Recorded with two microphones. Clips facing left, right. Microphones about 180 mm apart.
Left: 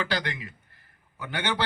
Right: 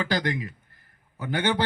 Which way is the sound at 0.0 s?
45° right (ahead or behind).